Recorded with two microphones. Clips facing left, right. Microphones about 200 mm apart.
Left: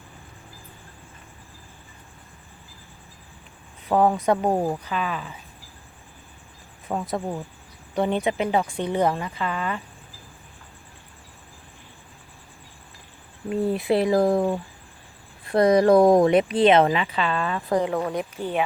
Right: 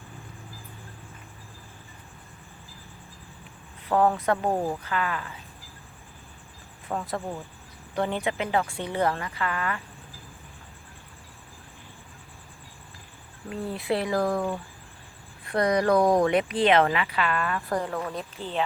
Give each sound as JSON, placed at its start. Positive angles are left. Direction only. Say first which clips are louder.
{"t": 3.8, "sound": "speech", "louder": "left 3 dB", "side_deg": 15}
{"t": 6.8, "sound": "speech", "louder": "left 4 dB", "side_deg": 20}
{"t": 13.7, "sound": "speech", "louder": "left 4 dB", "side_deg": 20}